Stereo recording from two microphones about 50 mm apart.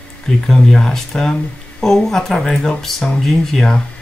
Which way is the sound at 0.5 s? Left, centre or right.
Centre.